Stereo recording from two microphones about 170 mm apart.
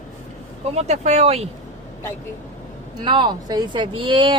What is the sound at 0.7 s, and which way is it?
Speech, 40° right (ahead or behind).